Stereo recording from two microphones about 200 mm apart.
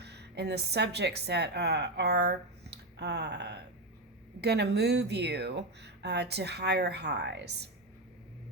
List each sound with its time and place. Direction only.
0.0 s a woman's voice: 55° right (ahead or behind)